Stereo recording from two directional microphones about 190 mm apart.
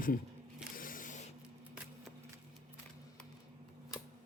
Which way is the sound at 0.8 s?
45° left (ahead or behind).